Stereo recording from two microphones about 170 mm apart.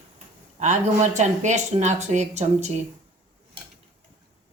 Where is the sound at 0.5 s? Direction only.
45° right (ahead or behind).